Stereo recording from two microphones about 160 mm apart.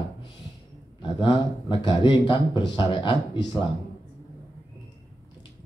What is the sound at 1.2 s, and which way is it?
Speech, 25° left (ahead or behind).